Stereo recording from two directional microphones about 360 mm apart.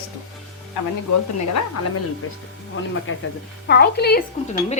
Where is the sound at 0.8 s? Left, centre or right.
Left.